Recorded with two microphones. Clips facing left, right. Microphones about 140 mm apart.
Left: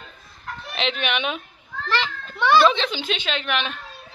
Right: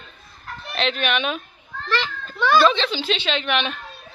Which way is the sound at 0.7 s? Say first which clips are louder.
Right 2 dB; 15° left (ahead or behind).